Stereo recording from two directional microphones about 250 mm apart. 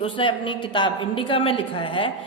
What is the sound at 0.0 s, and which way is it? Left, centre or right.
A woman's voice, centre.